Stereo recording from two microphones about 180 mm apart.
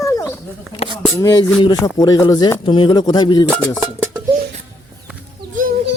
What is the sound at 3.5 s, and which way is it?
Speech, 10° left (ahead or behind).